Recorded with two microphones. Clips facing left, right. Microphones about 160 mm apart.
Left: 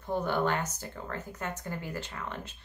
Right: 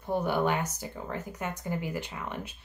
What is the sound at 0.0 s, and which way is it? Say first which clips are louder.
Speech: right 2 dB; 10° right (ahead or behind).